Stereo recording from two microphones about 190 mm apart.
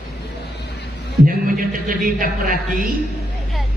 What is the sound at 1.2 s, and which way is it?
A man's voice, 45° right (ahead or behind).